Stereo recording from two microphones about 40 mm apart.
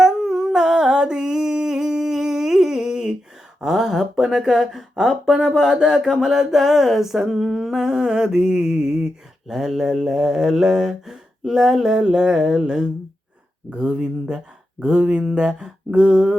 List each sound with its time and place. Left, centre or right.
0.0 s humming: centre
0.5 s a sound: centre
3.6 s mantra: centre
13.7 s speech: right